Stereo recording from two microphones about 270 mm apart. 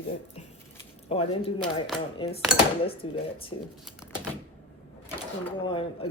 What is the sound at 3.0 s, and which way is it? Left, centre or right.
Speech, centre.